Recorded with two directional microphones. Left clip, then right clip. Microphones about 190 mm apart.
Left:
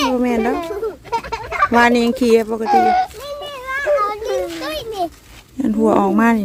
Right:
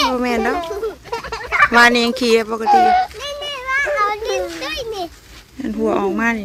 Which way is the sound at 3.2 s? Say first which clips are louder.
Right 2 dB; 45° left (ahead or behind).